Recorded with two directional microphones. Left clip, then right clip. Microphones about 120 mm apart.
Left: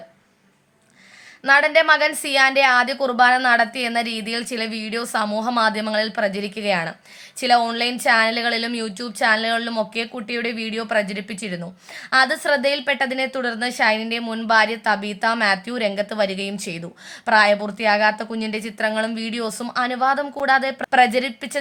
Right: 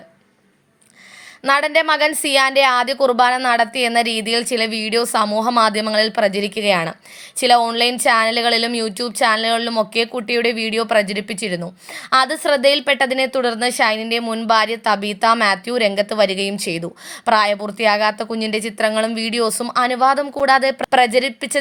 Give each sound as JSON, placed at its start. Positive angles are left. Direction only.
{"t": 1.5, "sound": "a woman's voice", "side_deg": -45}